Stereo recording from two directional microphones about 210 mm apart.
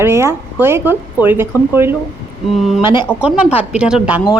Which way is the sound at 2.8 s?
10° right (ahead or behind).